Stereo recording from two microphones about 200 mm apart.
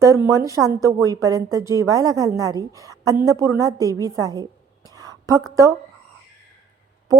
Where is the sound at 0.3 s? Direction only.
15° right (ahead or behind).